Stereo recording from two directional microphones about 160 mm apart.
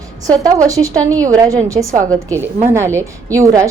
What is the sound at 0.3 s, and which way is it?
A woman's voice, 20° right (ahead or behind).